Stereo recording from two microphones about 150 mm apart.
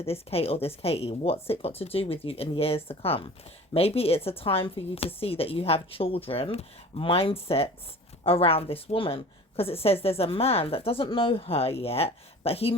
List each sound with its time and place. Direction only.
0.0 s a woman's voice: 40° left (ahead or behind)